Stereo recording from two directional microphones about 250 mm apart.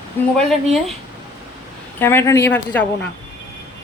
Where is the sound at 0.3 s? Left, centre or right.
Centre.